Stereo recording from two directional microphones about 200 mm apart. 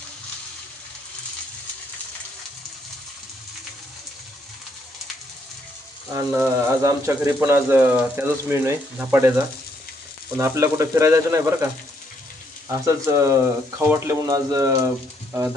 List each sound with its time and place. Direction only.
6.1 s speech: 10° right (ahead or behind)
12.8 s speech: 15° right (ahead or behind)